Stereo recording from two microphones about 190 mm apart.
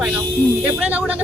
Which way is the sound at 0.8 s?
10° right (ahead or behind).